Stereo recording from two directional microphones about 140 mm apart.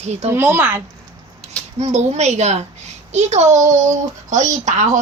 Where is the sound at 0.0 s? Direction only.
50° right (ahead or behind).